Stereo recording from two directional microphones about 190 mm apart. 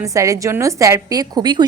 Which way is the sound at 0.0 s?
15° right (ahead or behind).